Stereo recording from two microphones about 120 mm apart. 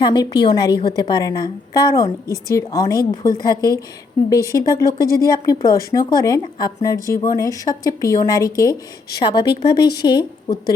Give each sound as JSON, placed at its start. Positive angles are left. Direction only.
{"t": 0.0, "sound": "a woman's voice", "side_deg": 35}